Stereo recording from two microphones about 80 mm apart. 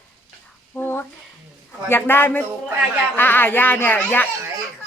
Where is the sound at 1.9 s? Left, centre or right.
Left.